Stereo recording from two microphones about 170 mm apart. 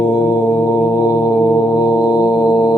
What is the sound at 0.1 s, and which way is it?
Music, 20° left (ahead or behind).